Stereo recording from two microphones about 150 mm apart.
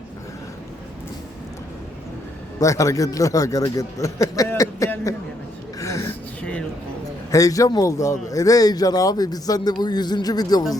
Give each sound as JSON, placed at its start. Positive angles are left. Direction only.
{"t": 2.6, "sound": "a man's voice", "side_deg": 20}
{"t": 5.8, "sound": "a sound", "side_deg": 20}
{"t": 7.3, "sound": "a man's voice", "side_deg": 25}